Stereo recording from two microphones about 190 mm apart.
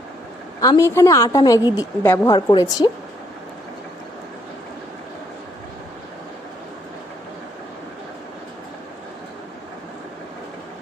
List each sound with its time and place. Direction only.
0.6 s a woman's voice: 15° left (ahead or behind)